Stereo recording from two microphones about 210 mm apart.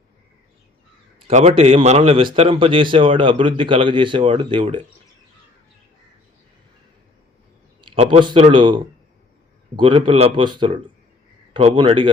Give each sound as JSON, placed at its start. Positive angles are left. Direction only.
{"t": 1.3, "sound": "a man's voice", "side_deg": -35}
{"t": 7.9, "sound": "a man's voice", "side_deg": -25}